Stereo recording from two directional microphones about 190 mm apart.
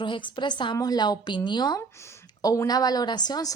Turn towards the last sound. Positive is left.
turn(degrees=20)  # may be behind; listen again after turning